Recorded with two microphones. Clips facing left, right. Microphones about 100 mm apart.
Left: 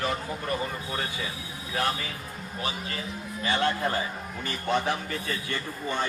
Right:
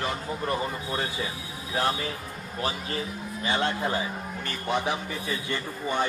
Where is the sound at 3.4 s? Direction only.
25° right (ahead or behind).